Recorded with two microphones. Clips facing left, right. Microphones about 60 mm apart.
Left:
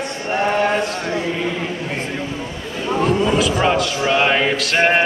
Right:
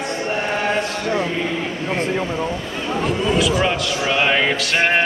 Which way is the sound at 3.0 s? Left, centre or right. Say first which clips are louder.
Left 2 dB; centre.